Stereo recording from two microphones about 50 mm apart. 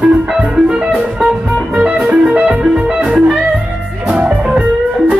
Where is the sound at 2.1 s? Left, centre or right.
Right.